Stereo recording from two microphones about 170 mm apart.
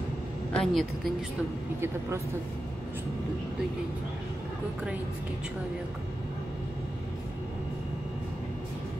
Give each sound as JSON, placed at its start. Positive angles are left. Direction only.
{"t": 0.5, "sound": "a woman's voice", "side_deg": 5}
{"t": 1.8, "sound": "speech", "side_deg": -15}